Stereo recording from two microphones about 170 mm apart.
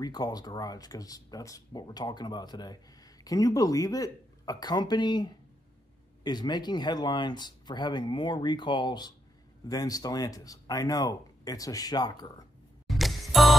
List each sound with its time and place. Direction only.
0.0 s speech: 25° left (ahead or behind)
12.8 s music: centre (ahead or behind)